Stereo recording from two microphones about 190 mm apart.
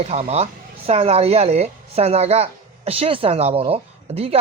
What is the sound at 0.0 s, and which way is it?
Speech, 35° right (ahead or behind).